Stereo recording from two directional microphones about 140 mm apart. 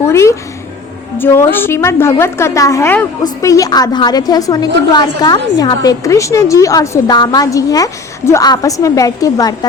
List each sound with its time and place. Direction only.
0.0 s a woman's voice: 20° left (ahead or behind)